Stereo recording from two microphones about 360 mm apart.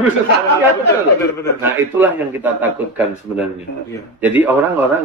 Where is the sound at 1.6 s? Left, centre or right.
Centre.